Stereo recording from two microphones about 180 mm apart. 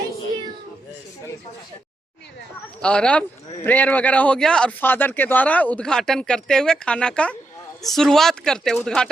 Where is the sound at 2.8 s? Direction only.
5° left (ahead or behind).